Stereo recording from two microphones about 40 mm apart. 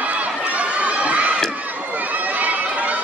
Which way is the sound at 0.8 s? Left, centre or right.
Right.